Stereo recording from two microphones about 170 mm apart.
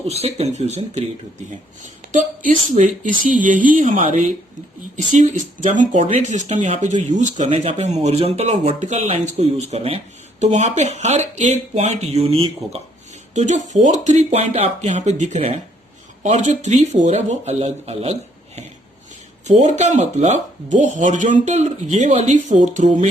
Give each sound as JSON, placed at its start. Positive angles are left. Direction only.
{"t": 0.1, "sound": "speech", "side_deg": -40}
{"t": 13.3, "sound": "speech", "side_deg": -45}